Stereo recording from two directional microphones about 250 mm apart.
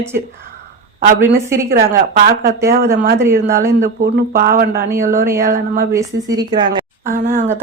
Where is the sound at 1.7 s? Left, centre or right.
Right.